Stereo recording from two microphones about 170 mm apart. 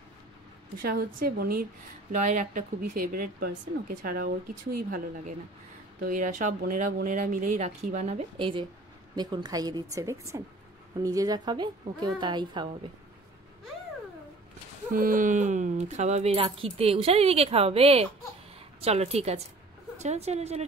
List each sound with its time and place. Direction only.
0.8 s speech: 60° right (ahead or behind)
2.1 s speech: 50° right (ahead or behind)
6.0 s speech: 50° right (ahead or behind)
8.4 s speech: 30° right (ahead or behind)
14.9 s speech: 50° right (ahead or behind)